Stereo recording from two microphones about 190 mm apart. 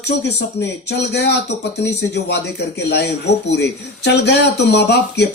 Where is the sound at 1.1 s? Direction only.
60° left (ahead or behind).